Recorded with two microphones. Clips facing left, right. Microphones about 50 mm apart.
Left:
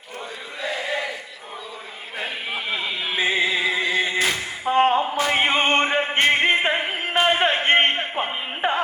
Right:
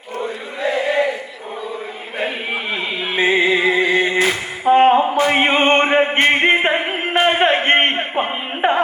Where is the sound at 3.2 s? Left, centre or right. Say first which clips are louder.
Right 7 dB; right.